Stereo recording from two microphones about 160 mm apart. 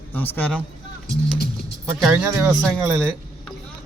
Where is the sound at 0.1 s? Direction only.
10° left (ahead or behind).